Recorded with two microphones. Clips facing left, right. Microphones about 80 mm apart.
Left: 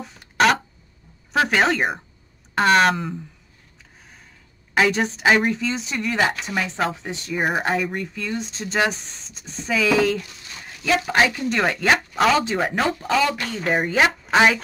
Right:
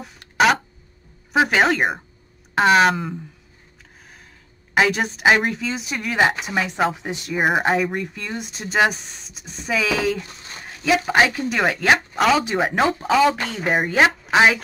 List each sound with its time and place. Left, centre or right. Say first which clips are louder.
0.0 s a sound: right 1 dB; centre
1.3 s speech: right 2 dB; centre
4.8 s speech: even; centre
10.2 s a sound: right 2 dB; right
10.9 s speech: right 2 dB; centre
13.2 s speech: right 4 dB; right
13.7 s speech: right 2 dB; centre